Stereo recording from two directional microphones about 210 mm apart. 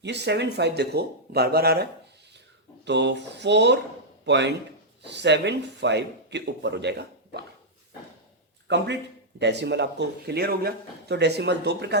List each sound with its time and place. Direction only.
0.0 s speech: 55° right (ahead or behind)
8.6 s speech: 55° right (ahead or behind)